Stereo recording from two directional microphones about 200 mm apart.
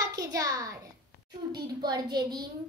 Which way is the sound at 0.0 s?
15° right (ahead or behind).